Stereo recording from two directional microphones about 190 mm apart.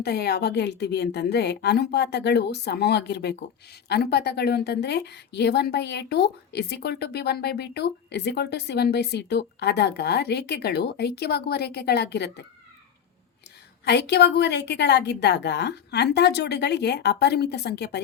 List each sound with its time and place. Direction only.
0.0 s a woman's voice: 60° left (ahead or behind)
13.8 s a woman's voice: 65° left (ahead or behind)